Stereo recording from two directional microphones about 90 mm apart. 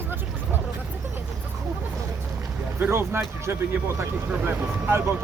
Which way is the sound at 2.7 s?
25° right (ahead or behind).